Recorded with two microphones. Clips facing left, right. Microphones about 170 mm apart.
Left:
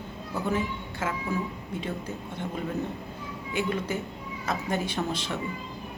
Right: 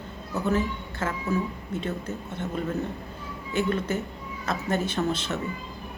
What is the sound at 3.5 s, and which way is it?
A woman's voice, 10° left (ahead or behind).